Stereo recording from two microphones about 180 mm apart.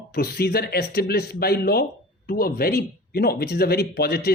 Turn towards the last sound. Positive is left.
turn(degrees=60)  # may be behind; listen again after turning